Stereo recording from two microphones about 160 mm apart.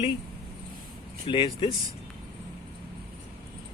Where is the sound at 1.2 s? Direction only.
30° left (ahead or behind).